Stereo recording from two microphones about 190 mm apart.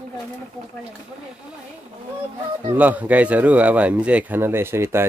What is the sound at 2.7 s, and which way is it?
Speech, 10° right (ahead or behind).